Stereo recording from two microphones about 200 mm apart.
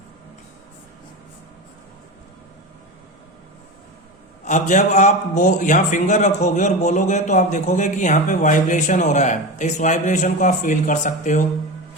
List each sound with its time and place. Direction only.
4.4 s a man's voice: 35° left (ahead or behind)